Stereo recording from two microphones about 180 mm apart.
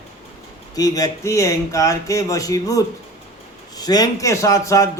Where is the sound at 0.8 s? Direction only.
20° left (ahead or behind).